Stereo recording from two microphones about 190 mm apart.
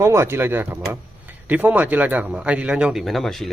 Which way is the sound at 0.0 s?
15° right (ahead or behind).